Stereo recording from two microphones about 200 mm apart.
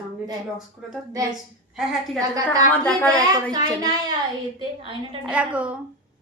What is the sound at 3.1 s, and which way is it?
Speech, 20° right (ahead or behind).